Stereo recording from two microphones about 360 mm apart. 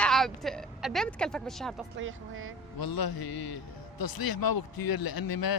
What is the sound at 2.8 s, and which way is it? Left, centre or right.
Speech, left.